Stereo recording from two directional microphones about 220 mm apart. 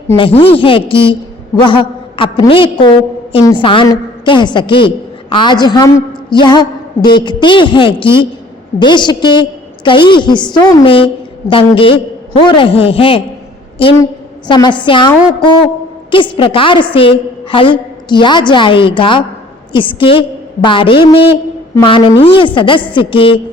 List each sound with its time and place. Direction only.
0.2 s a woman's voice: 25° left (ahead or behind)
16.1 s a woman's voice: 25° left (ahead or behind)